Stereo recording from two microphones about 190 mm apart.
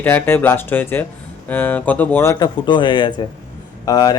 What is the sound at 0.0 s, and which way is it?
Speech, 10° left (ahead or behind).